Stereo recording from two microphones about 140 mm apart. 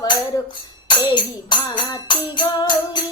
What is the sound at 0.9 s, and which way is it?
Music, 30° left (ahead or behind).